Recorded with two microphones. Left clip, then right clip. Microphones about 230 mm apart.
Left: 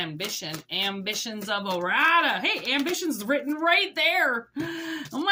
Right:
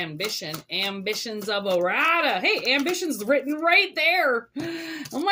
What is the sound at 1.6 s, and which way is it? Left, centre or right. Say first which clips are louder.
Speech: right 1 dB; centre.